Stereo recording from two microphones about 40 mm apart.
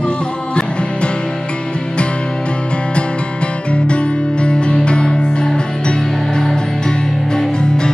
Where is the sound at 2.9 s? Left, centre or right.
Left.